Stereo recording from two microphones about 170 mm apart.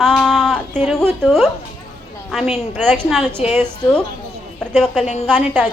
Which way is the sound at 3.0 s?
Centre (ahead or behind).